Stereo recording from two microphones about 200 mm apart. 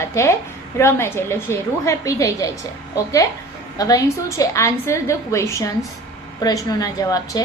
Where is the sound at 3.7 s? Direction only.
20° left (ahead or behind).